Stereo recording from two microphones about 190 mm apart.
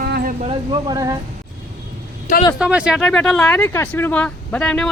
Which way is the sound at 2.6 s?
5° right (ahead or behind).